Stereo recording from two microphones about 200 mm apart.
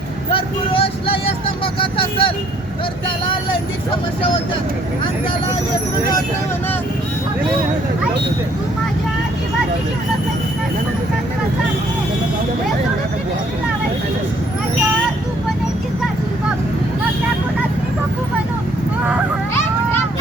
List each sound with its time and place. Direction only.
0.3 s vehicle: 25° left (ahead or behind)
1.8 s speech: 25° left (ahead or behind)